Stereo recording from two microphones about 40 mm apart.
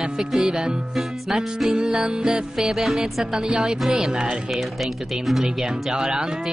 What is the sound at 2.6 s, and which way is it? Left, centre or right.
Music, centre.